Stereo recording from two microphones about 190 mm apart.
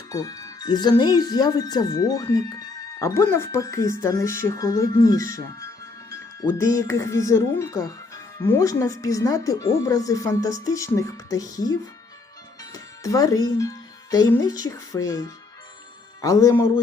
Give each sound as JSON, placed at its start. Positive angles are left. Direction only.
{"t": 0.1, "sound": "speech", "side_deg": 20}